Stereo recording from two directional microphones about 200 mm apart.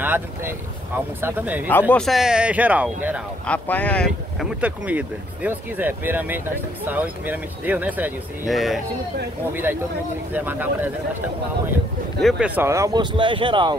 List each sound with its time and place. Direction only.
0.0 s speech: 10° right (ahead or behind)
1.7 s speech: 10° left (ahead or behind); by 3.2 s 5° right (ahead or behind)
3.4 s speech: 10° left (ahead or behind)
4.6 s speech: 5° right (ahead or behind); by 13.7 s 25° right (ahead or behind)